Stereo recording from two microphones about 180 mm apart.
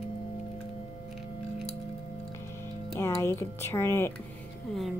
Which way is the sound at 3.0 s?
15° left (ahead or behind).